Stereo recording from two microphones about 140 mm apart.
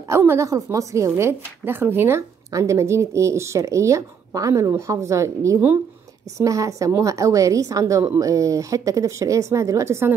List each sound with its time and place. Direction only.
0.1 s a woman's voice: 20° right (ahead or behind)